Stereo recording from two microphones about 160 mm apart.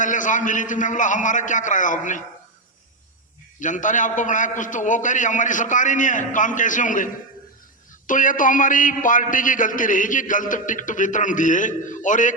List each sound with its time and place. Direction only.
0.0 s a man's voice: 55° left (ahead or behind)
3.6 s a man's voice: 50° left (ahead or behind)